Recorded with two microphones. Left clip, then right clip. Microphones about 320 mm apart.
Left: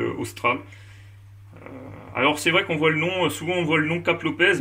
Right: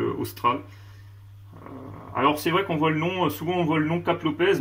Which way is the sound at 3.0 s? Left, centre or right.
Centre.